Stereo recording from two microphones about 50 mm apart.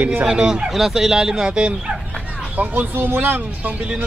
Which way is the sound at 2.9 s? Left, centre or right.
Right.